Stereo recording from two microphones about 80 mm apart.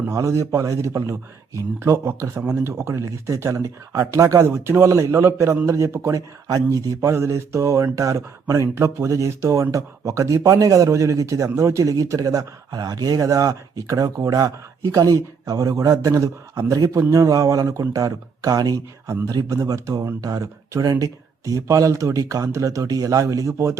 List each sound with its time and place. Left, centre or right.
0.1 s speech: right
2.3 s speech: right